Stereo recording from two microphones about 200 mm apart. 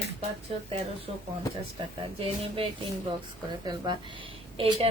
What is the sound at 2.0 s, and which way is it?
Speech, 25° right (ahead or behind).